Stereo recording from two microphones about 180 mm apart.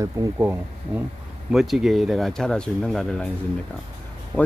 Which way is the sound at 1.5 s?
Centre (ahead or behind).